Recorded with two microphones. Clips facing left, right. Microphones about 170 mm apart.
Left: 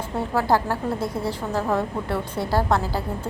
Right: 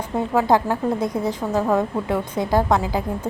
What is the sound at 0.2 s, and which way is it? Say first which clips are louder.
A woman's voice: right 3 dB; 20° right (ahead or behind).